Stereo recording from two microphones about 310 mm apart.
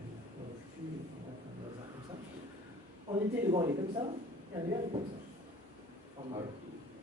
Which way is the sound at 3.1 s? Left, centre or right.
Centre.